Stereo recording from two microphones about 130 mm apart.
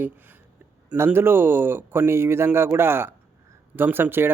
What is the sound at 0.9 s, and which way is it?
Speech, 15° right (ahead or behind).